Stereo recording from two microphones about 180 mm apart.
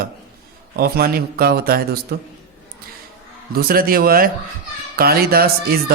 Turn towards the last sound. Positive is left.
turn(degrees=-55)  # may be behind; listen again after turning